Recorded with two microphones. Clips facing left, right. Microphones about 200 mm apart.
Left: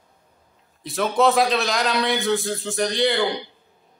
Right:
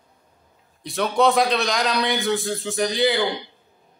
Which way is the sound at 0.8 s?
Centre (ahead or behind).